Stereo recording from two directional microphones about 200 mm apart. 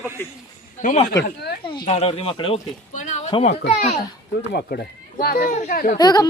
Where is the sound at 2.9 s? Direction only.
35° left (ahead or behind).